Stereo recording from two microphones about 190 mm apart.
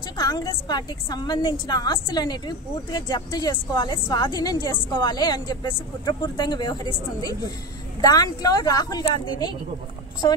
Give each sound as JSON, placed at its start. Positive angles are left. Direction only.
{"t": 0.2, "sound": "a woman's voice", "side_deg": 20}
{"t": 10.2, "sound": "a woman's voice", "side_deg": 20}